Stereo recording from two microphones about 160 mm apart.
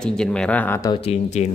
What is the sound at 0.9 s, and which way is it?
Speech, 40° left (ahead or behind).